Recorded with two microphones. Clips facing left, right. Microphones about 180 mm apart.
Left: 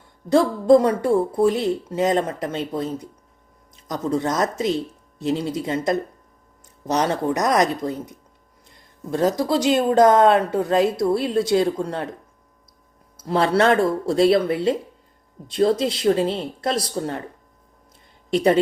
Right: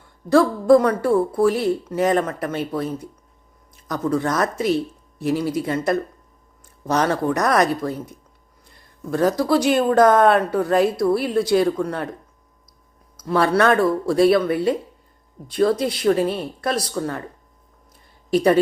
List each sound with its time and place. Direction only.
0.3 s speech: 20° left (ahead or behind)
13.1 s speech: 25° left (ahead or behind)
18.3 s speech: 25° left (ahead or behind)